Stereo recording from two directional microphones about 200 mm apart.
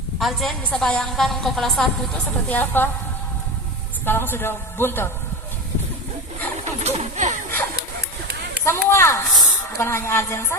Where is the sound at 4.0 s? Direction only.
10° left (ahead or behind).